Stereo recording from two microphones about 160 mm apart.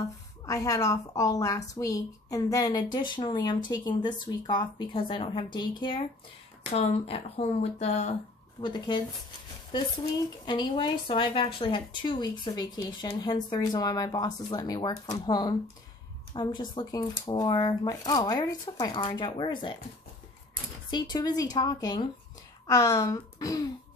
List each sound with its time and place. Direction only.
0.5 s a woman's voice: 20° left (ahead or behind); by 8.1 s 40° left (ahead or behind)
8.5 s a woman's voice: 30° left (ahead or behind)
10.4 s a woman's voice: 30° left (ahead or behind)
20.9 s a woman's voice: 25° left (ahead or behind)